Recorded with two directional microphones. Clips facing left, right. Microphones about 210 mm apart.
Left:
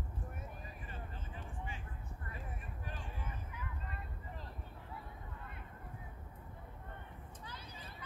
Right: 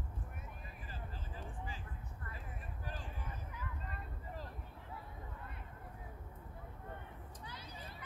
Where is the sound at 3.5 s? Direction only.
40° right (ahead or behind).